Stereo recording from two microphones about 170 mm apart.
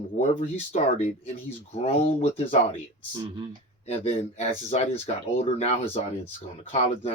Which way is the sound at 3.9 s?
40° left (ahead or behind).